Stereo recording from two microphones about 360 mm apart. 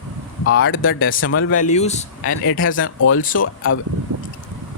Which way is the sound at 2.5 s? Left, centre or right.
Left.